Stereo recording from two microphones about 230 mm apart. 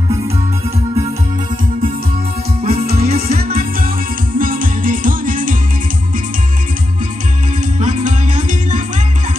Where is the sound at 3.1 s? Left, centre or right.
Right.